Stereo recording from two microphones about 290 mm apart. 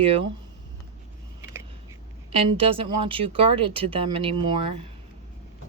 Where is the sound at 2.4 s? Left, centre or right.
Centre.